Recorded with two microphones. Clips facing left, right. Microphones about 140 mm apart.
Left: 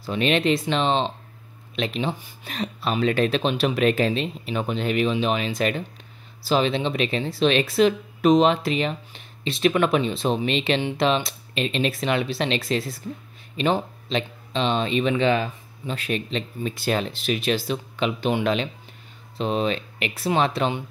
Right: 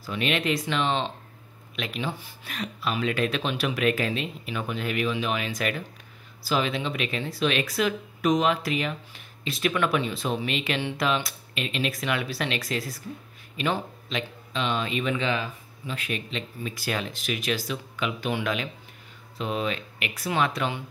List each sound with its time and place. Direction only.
0.0 s speech: 30° left (ahead or behind)